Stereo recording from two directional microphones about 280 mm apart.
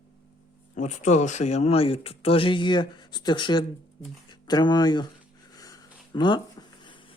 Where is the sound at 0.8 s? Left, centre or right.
Left.